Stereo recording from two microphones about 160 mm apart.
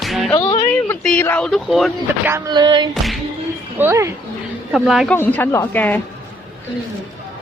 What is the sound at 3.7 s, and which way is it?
Speech, 15° right (ahead or behind).